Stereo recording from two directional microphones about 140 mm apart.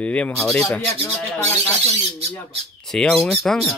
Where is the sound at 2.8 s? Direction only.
5° left (ahead or behind).